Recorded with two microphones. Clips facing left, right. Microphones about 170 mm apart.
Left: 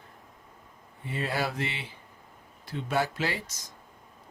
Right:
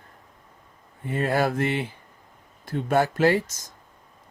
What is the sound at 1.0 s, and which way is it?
Speech, 50° right (ahead or behind).